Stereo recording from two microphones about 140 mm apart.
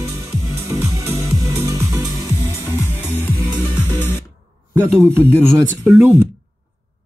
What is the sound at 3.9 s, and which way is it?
Music, 15° left (ahead or behind).